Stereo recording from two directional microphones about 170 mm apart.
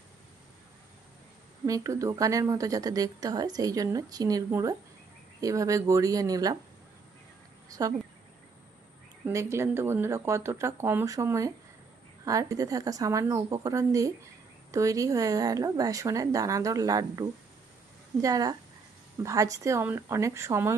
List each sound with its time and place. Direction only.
1.6 s speech: 20° right (ahead or behind)
7.7 s speech: 20° right (ahead or behind)
9.2 s speech: 15° right (ahead or behind)